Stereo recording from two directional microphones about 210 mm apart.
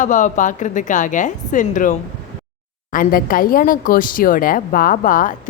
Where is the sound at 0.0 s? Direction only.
35° left (ahead or behind).